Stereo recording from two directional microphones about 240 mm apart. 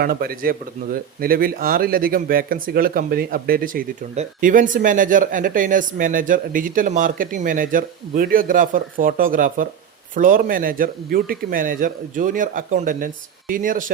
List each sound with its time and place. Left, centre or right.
0.0 s speech: right